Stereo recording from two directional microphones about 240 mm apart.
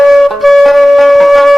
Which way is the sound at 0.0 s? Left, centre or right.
Centre.